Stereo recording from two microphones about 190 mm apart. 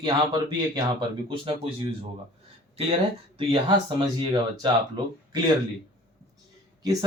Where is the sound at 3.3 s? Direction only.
25° right (ahead or behind).